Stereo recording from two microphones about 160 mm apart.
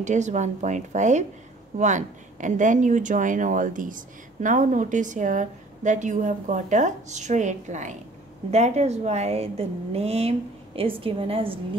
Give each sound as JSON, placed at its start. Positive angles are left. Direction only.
{"t": 0.0, "sound": "a woman's voice", "side_deg": -50}